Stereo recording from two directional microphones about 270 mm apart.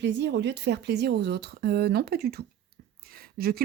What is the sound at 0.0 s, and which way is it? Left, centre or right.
Speech, right.